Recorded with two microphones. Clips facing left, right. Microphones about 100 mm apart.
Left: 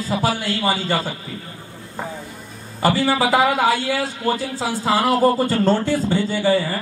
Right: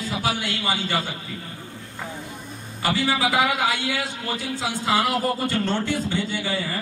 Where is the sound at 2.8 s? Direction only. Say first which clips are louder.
Left 5 dB; 35° left (ahead or behind).